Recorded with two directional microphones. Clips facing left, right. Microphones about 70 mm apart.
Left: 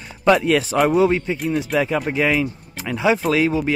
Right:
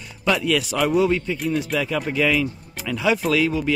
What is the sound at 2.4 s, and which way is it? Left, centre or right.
Speech, left.